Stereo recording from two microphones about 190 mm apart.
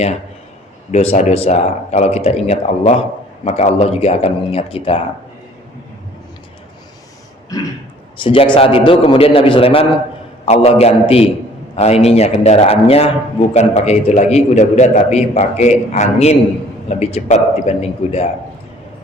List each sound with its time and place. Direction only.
0.9 s a man's voice: 35° left (ahead or behind)
7.5 s a man's voice: 20° left (ahead or behind)